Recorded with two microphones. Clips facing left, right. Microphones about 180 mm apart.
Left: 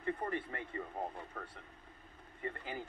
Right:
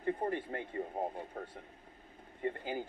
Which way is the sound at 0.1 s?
25° right (ahead or behind).